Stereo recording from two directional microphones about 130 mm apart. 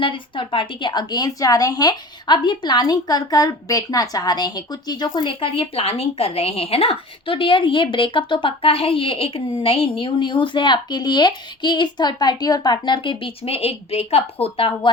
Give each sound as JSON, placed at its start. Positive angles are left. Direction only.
{"t": 0.0, "sound": "a woman's voice", "side_deg": 40}